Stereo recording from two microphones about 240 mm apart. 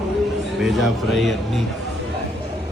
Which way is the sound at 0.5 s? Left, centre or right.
Centre.